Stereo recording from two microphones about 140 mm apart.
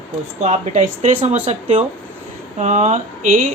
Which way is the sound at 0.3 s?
55° right (ahead or behind).